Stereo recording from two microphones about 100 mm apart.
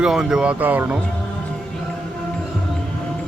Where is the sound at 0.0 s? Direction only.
5° right (ahead or behind).